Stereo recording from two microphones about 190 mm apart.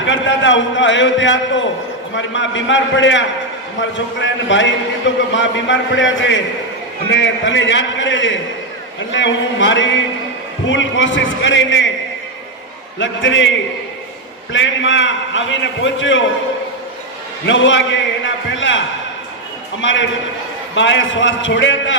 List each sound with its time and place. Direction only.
0.0 s a man's voice: 75° left (ahead or behind)
13.0 s a man's voice: 75° left (ahead or behind)
14.5 s a man's voice: 75° left (ahead or behind)
17.4 s a man's voice: 80° left